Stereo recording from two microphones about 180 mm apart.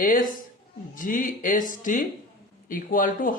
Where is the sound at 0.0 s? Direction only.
50° left (ahead or behind).